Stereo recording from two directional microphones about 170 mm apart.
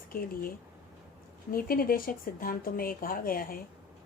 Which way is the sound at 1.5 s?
60° left (ahead or behind).